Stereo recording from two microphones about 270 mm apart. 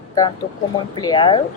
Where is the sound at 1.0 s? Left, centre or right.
Centre.